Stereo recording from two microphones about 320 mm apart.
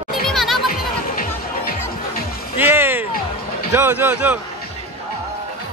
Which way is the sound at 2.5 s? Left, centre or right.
Centre.